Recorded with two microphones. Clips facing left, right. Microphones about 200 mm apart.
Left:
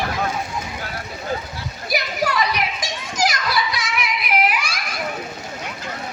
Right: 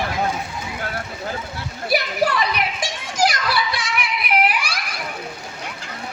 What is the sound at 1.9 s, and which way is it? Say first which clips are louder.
Children playing: right 3 dB; 30° right (ahead or behind).